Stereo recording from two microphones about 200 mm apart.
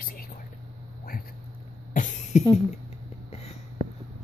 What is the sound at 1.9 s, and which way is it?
Cough, 40° left (ahead or behind).